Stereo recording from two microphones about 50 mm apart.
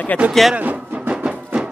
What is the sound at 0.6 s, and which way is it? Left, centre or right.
Music, right.